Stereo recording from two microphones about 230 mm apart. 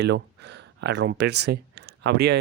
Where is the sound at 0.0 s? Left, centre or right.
Right.